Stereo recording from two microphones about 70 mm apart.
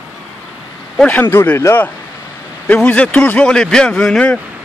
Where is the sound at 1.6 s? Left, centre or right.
Left.